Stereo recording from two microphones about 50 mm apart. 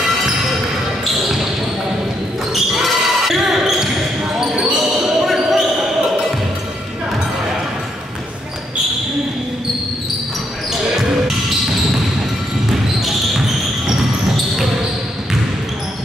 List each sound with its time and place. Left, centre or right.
2.5 s basketball bounce: centre
5.0 s basketball bounce: centre